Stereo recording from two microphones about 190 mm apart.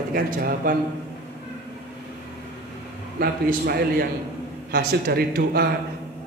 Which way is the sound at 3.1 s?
55° right (ahead or behind).